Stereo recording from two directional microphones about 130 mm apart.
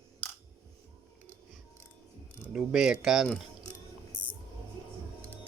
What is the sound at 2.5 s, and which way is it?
Speech, 5° right (ahead or behind).